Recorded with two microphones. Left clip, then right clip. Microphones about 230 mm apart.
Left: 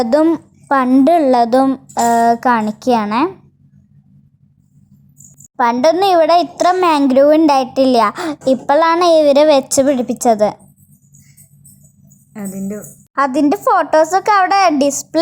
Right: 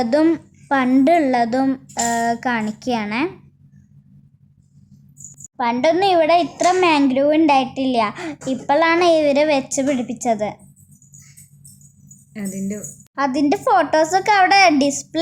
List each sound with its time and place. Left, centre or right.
0.0 s a woman's voice: centre
5.5 s a woman's voice: left
12.3 s speech: centre
13.1 s a woman's voice: left